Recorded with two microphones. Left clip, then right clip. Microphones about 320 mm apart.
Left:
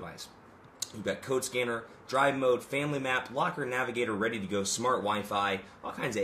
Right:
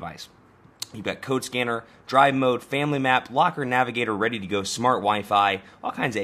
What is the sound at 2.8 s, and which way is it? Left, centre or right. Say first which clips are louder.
Speech: right 9 dB; right.